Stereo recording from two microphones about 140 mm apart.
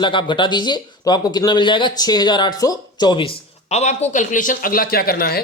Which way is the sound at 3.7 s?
55° left (ahead or behind).